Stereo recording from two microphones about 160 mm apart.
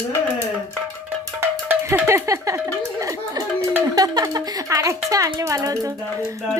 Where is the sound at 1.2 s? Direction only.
15° right (ahead or behind).